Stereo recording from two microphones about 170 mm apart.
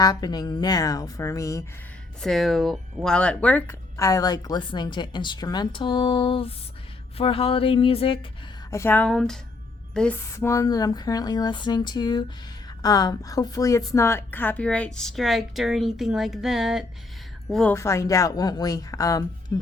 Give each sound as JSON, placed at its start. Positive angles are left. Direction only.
{"t": 0.0, "sound": "speech", "side_deg": 20}
{"t": 2.2, "sound": "speech", "side_deg": 0}
{"t": 8.7, "sound": "a woman's voice", "side_deg": 15}
{"t": 9.9, "sound": "music", "side_deg": 5}
{"t": 10.3, "sound": "a woman's voice", "side_deg": 15}
{"t": 17.7, "sound": "speech", "side_deg": 15}